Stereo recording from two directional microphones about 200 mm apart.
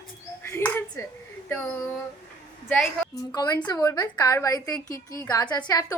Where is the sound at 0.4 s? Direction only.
10° left (ahead or behind).